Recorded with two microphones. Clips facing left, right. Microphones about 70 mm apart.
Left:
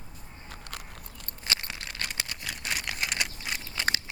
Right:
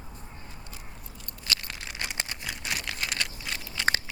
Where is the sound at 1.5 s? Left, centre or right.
Left.